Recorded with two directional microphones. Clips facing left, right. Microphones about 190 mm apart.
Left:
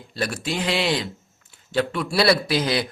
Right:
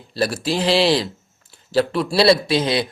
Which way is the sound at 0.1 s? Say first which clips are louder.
Right 6 dB; 35° right (ahead or behind).